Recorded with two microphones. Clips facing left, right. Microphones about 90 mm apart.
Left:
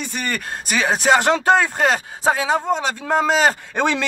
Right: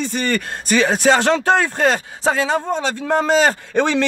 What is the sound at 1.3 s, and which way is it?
A man's voice, 20° left (ahead or behind).